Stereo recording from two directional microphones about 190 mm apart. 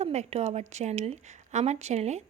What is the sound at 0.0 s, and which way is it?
A woman's voice, 35° right (ahead or behind).